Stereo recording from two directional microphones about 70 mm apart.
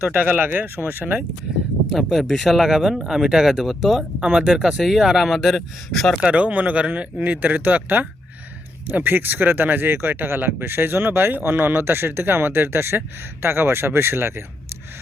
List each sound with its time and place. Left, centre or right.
0.0 s speech: right
1.9 s speech: centre
6.2 s speech: centre; by 14.4 s right